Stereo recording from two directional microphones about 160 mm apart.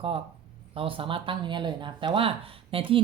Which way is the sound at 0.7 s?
35° right (ahead or behind).